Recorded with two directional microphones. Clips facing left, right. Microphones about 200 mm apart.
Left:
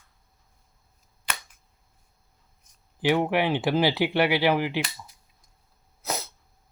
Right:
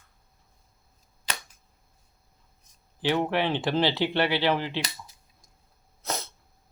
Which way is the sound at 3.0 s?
15° left (ahead or behind).